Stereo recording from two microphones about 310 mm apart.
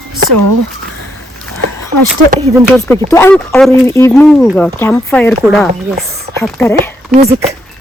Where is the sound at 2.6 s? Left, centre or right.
Centre.